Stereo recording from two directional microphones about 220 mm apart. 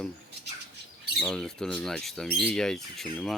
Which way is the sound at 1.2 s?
Centre (ahead or behind).